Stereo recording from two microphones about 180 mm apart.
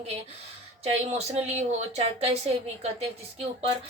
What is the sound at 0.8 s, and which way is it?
A woman's voice, 35° right (ahead or behind).